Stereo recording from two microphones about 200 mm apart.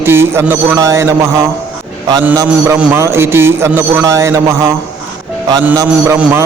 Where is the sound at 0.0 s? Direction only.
10° right (ahead or behind).